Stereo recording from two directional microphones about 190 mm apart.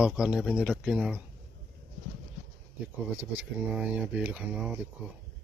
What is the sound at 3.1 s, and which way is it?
Speech, 5° right (ahead or behind).